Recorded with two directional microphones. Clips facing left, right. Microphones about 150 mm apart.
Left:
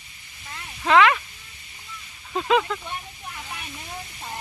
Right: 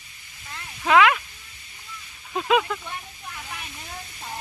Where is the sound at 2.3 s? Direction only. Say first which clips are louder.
Even; 5° right (ahead or behind).